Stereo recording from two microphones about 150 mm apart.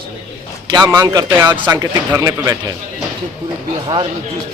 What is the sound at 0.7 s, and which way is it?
A man's voice, 20° right (ahead or behind).